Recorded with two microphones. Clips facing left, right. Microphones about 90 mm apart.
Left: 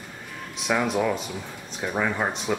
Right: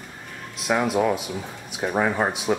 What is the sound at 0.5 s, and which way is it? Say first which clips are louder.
Speech: right 2 dB; centre (ahead or behind).